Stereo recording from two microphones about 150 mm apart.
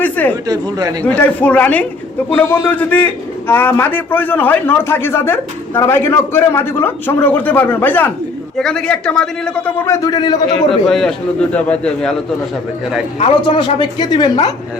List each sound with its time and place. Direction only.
0.0 s speech: 10° left (ahead or behind)
0.4 s speech: 25° right (ahead or behind)
1.0 s a man's voice: 10° left (ahead or behind); by 10.6 s 25° left (ahead or behind)
10.7 s a man's voice: 5° left (ahead or behind)
13.1 s a woman's voice: 40° left (ahead or behind)